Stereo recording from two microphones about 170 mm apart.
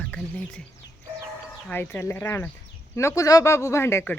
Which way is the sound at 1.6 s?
10° left (ahead or behind).